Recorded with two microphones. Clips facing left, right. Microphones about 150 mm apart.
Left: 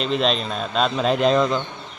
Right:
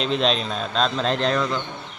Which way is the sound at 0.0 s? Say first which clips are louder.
Left 1 dB; centre (ahead or behind).